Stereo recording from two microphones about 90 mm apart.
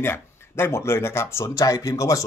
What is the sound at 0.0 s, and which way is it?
Speech, 25° left (ahead or behind).